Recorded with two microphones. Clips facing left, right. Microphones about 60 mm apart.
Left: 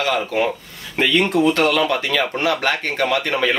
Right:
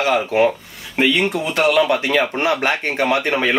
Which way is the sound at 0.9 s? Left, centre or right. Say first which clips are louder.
Left 1 dB; centre.